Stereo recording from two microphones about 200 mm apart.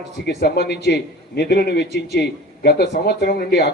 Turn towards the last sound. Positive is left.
turn(degrees=50)  # may be behind; listen again after turning